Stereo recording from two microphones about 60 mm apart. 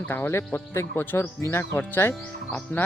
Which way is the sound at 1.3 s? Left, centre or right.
Left.